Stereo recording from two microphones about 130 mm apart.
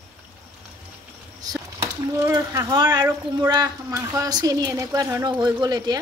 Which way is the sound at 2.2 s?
25° right (ahead or behind).